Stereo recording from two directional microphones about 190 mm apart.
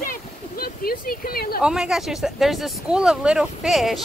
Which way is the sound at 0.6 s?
50° left (ahead or behind).